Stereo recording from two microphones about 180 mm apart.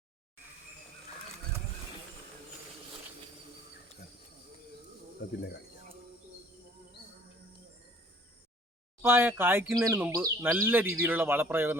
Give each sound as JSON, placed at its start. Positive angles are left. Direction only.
{"t": 5.4, "sound": "speech", "side_deg": 65}
{"t": 9.0, "sound": "speech", "side_deg": -10}